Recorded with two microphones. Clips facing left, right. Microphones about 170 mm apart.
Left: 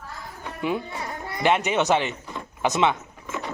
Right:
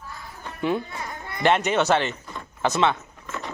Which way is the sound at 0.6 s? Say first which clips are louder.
Right 2 dB; 5° left (ahead or behind).